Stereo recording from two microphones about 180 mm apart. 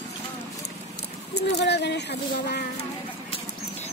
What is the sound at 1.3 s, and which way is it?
Speech, 70° left (ahead or behind).